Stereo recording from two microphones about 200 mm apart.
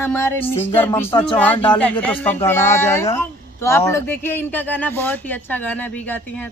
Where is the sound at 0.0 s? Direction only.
10° left (ahead or behind).